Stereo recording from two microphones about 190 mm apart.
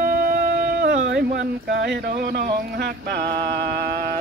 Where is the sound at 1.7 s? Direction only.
60° right (ahead or behind).